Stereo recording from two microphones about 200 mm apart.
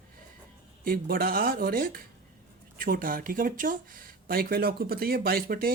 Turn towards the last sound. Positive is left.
turn(degrees=-45)  # may be behind; listen again after turning